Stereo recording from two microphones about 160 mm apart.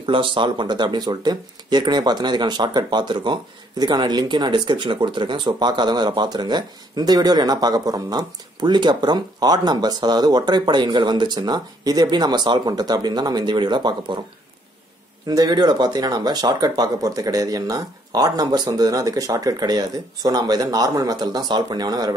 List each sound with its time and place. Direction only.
0.0 s speech: 30° right (ahead or behind)
15.2 s speech: 25° right (ahead or behind)